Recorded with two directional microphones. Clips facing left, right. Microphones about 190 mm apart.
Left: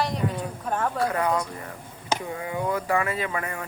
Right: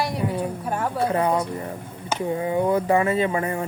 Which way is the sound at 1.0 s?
25° right (ahead or behind).